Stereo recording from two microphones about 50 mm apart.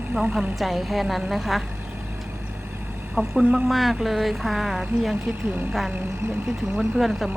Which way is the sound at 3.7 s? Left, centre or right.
Centre.